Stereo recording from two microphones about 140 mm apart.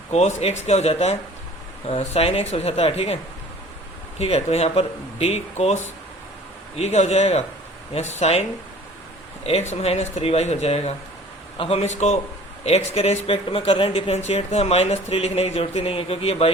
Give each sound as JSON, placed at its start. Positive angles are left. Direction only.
{"t": 0.1, "sound": "speech", "side_deg": 50}
{"t": 4.2, "sound": "speech", "side_deg": 50}
{"t": 9.5, "sound": "speech", "side_deg": 50}